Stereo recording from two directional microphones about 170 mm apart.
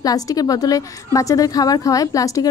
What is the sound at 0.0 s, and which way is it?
A woman's voice, 20° left (ahead or behind).